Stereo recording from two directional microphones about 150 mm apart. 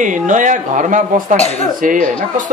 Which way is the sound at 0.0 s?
60° right (ahead or behind).